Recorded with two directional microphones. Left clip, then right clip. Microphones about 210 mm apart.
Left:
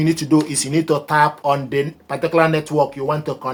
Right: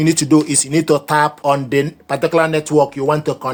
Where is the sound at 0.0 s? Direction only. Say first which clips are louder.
Right 3 dB; 45° right (ahead or behind).